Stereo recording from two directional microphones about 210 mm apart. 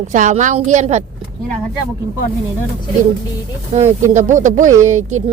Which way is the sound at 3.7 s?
30° right (ahead or behind).